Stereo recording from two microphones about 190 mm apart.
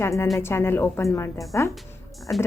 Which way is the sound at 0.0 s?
15° left (ahead or behind).